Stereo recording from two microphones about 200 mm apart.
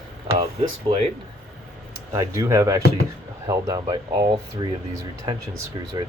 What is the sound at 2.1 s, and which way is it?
Speech, 15° right (ahead or behind).